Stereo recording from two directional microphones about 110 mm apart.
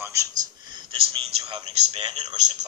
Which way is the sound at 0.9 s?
60° right (ahead or behind).